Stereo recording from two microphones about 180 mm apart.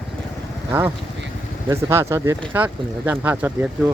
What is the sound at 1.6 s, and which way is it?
Speech, 15° right (ahead or behind).